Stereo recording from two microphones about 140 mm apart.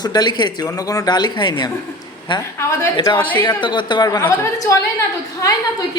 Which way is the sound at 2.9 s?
30° left (ahead or behind).